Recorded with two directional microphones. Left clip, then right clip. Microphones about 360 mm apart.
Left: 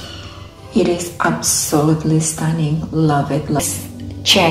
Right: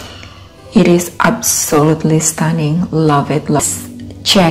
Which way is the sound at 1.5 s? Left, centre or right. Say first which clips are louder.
Right 4 dB; right.